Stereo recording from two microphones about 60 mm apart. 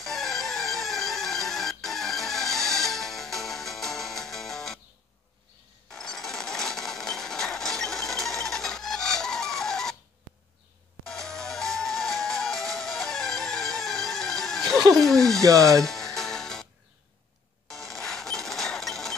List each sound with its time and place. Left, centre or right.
0.0 s music: centre
5.9 s a sound: centre
11.1 s music: centre
15.0 s a sound: centre
15.4 s speech: right
15.8 s music: centre
17.6 s coin: centre